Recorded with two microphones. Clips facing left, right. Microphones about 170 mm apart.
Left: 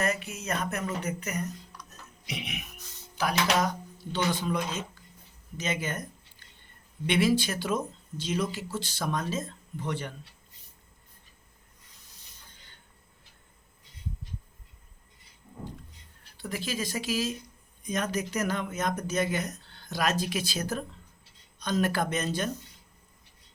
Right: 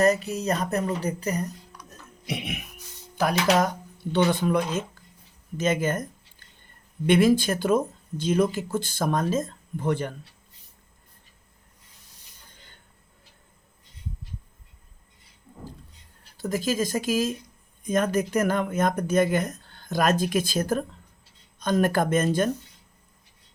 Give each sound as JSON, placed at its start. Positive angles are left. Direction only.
{"t": 0.0, "sound": "speech", "side_deg": -35}
{"t": 3.2, "sound": "speech", "side_deg": -50}
{"t": 7.1, "sound": "speech", "side_deg": -50}
{"t": 16.4, "sound": "speech", "side_deg": -45}